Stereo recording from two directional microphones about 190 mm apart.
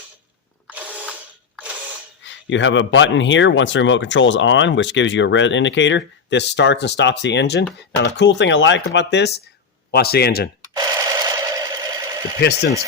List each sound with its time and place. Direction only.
0.7 s ratchet: 10° right (ahead or behind)
2.2 s a man's voice: 75° left (ahead or behind); by 10.5 s 55° left (ahead or behind)
10.8 s a sound: 20° right (ahead or behind)